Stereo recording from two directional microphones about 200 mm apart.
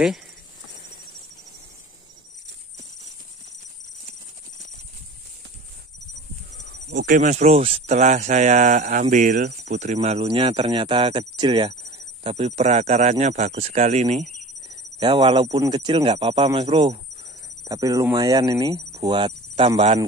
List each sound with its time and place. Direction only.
6.7 s speech: 55° right (ahead or behind); by 14.2 s 35° right (ahead or behind)
15.0 s speech: 25° right (ahead or behind)